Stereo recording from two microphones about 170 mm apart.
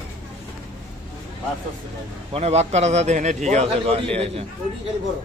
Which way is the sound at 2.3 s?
40° right (ahead or behind).